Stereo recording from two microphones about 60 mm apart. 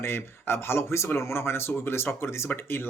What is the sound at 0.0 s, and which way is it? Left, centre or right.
Speech, left.